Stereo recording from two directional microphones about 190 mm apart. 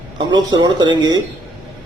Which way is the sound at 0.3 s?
20° right (ahead or behind).